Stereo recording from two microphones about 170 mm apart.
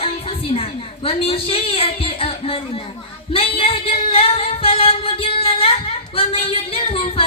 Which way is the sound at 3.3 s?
30° left (ahead or behind).